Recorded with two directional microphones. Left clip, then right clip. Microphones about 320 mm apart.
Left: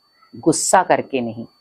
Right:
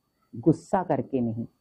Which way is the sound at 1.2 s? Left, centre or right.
Left.